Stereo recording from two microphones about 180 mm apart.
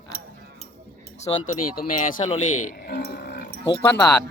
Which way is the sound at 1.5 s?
50° left (ahead or behind).